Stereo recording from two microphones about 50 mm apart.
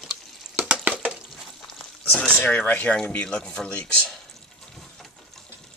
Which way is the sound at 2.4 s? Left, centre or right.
Left.